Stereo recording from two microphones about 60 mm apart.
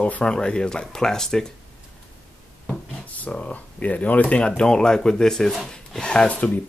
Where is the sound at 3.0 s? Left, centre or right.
Left.